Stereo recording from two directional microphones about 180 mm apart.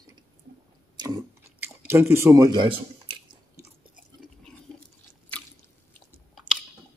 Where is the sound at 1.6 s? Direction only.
15° right (ahead or behind); by 3.2 s 30° right (ahead or behind).